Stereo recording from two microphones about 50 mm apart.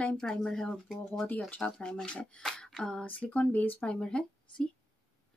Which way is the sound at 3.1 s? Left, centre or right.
Left.